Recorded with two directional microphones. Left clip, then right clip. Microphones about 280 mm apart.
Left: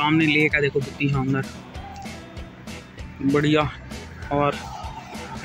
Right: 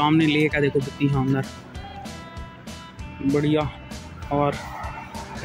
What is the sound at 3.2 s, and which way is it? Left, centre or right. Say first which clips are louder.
Speech: left 2 dB; centre.